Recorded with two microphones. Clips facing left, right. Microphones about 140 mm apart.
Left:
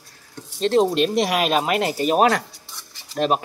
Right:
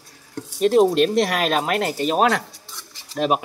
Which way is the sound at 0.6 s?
10° right (ahead or behind).